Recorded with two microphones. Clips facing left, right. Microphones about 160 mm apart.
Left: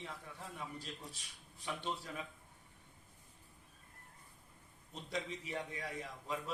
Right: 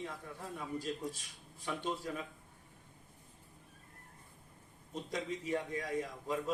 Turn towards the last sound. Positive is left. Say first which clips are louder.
# right 6 dB
turn(degrees=-45)  # may be behind; listen again after turning